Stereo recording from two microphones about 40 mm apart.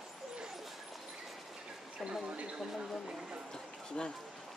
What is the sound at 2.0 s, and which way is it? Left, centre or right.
Speech, right.